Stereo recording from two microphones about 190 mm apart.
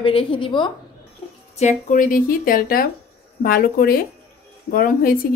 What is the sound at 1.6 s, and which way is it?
Speech, 40° left (ahead or behind).